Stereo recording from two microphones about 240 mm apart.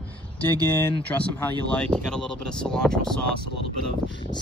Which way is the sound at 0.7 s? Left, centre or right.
Centre.